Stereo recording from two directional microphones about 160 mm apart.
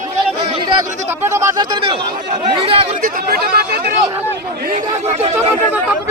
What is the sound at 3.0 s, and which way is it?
Chatter, 75° right (ahead or behind).